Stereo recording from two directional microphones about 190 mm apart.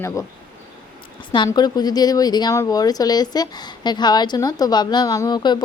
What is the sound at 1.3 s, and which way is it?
Speech, 25° left (ahead or behind).